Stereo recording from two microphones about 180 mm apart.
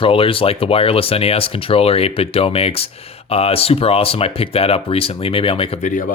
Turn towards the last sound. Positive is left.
turn(degrees=45)  # may be behind; listen again after turning